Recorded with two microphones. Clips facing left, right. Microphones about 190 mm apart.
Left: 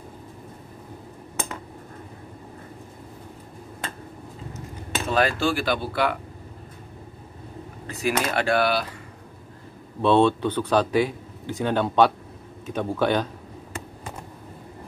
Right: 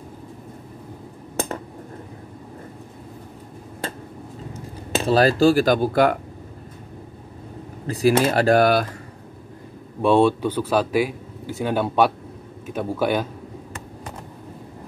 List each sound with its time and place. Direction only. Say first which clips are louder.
4.6 s speech: right 6 dB; 30° right (ahead or behind)
7.8 s speech: right 8 dB; 35° right (ahead or behind)
10.0 s speech: right 2 dB; 10° right (ahead or behind)